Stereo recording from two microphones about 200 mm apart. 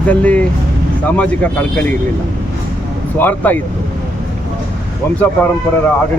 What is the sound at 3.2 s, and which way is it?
Speech, 10° left (ahead or behind).